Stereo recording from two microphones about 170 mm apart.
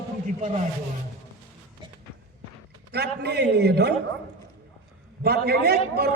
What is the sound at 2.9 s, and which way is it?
A man's voice, 75° right (ahead or behind).